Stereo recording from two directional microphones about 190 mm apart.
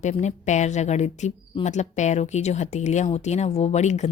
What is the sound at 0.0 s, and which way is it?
A woman's voice, 35° left (ahead or behind).